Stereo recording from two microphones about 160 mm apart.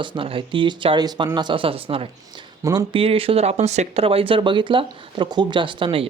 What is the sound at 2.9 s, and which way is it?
Speech, 35° right (ahead or behind).